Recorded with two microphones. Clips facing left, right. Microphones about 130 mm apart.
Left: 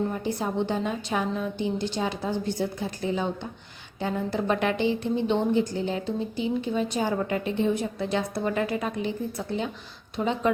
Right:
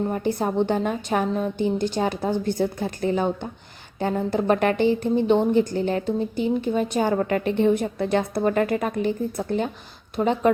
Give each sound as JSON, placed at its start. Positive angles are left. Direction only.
{"t": 0.1, "sound": "a woman's voice", "side_deg": -50}